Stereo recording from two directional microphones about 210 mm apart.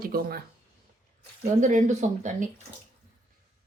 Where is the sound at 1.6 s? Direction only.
35° right (ahead or behind).